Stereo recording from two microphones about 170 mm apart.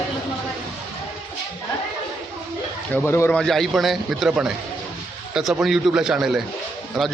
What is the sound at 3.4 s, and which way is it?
A man's voice, centre (ahead or behind).